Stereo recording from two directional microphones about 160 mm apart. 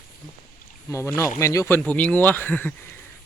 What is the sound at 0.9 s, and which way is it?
Speech, 20° left (ahead or behind).